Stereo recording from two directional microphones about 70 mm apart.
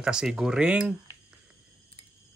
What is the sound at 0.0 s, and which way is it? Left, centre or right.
Speech, centre.